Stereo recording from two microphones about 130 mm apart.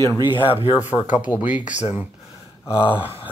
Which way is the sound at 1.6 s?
65° left (ahead or behind).